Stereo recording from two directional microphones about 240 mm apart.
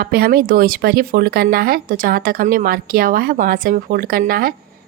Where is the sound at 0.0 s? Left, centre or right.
Right.